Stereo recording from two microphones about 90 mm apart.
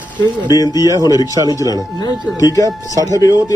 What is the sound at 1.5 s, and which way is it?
Speech, 45° left (ahead or behind).